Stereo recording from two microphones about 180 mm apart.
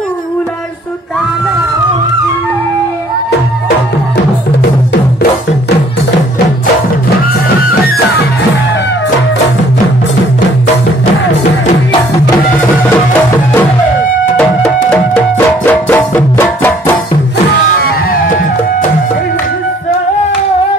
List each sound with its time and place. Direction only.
14.3 s music: 5° left (ahead or behind)
17.5 s music: 55° left (ahead or behind)